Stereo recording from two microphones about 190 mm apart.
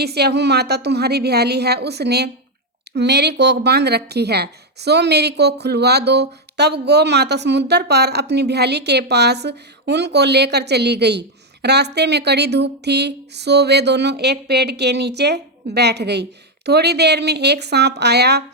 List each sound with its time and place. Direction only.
0.0 s a woman's voice: 60° right (ahead or behind)